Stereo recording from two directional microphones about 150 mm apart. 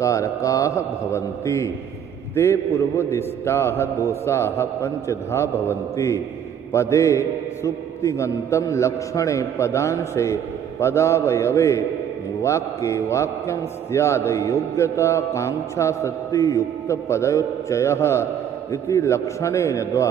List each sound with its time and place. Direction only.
0.0 s a man's voice: 20° left (ahead or behind)